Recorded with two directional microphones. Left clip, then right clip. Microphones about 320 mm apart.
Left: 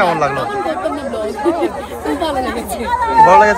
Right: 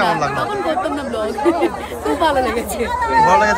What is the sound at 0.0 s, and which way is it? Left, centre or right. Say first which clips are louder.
Speech: left 3 dB; centre.